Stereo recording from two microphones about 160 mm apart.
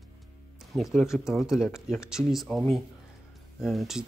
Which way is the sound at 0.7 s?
Centre (ahead or behind).